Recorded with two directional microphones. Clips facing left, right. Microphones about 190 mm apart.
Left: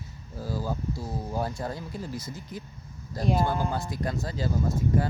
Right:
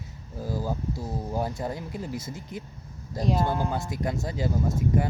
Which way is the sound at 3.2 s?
5° left (ahead or behind).